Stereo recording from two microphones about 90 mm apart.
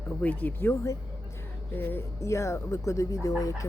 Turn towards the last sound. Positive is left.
turn(degrees=40)  # may be behind; listen again after turning